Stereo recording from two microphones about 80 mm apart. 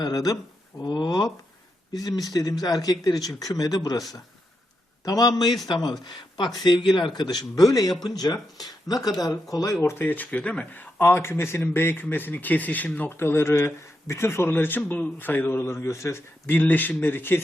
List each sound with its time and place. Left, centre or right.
0.0 s a man's voice: left
1.9 s speech: left
5.0 s a man's voice: left
9.8 s speech: left